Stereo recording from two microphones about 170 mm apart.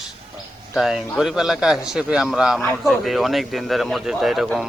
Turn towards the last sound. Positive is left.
turn(degrees=0)  # may be behind; listen again after turning